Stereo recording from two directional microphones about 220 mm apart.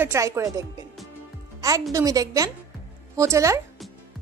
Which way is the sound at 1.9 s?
15° right (ahead or behind).